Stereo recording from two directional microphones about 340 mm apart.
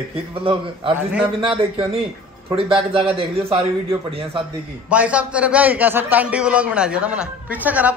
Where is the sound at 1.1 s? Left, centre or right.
Centre.